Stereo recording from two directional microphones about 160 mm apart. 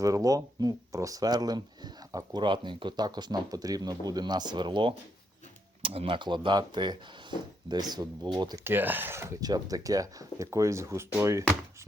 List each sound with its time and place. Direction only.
0.0 s speech: 20° right (ahead or behind)